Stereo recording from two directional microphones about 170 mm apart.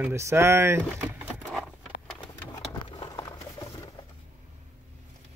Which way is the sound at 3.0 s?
25° left (ahead or behind).